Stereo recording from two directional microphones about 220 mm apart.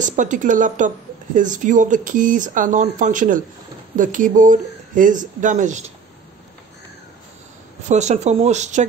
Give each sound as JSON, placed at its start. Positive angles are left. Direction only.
{"t": 0.0, "sound": "speech", "side_deg": -35}
{"t": 7.9, "sound": "speech", "side_deg": -30}